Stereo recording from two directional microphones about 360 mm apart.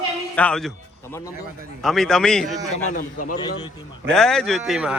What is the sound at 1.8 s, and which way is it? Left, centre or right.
Speech, centre.